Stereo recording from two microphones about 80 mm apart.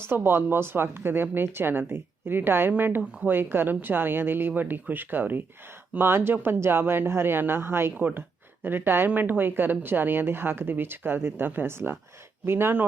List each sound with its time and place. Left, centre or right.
0.1 s speech: right